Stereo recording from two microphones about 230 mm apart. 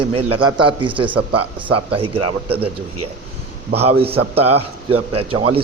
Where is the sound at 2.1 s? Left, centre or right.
Right.